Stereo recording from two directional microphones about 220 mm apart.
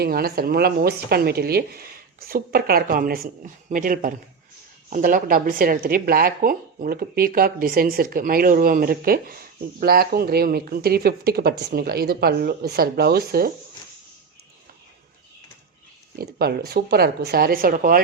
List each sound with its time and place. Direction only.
0.0 s speech: 45° right (ahead or behind)
16.1 s speech: 45° right (ahead or behind)